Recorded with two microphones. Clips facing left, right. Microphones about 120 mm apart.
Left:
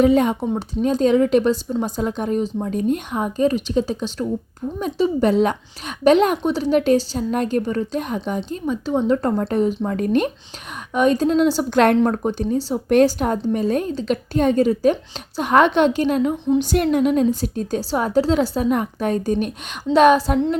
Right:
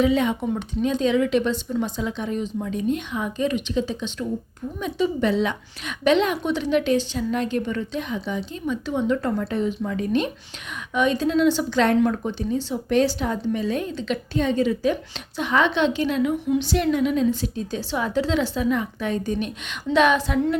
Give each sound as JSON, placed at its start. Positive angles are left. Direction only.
{"t": 0.0, "sound": "a woman's voice", "side_deg": 45}
{"t": 8.4, "sound": "a woman's voice", "side_deg": 35}
{"t": 12.9, "sound": "a woman's voice", "side_deg": 50}